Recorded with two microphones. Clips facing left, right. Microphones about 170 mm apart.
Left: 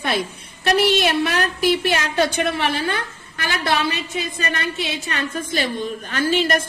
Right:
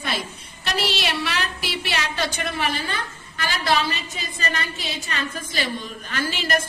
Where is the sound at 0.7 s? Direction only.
50° left (ahead or behind).